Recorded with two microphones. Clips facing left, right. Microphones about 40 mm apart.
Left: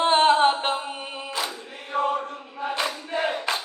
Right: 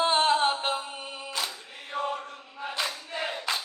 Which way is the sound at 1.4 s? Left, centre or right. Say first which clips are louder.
Left 3 dB; left.